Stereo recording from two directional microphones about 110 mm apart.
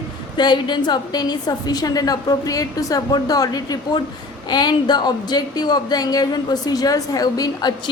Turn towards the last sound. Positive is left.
turn(degrees=35)  # may be behind; listen again after turning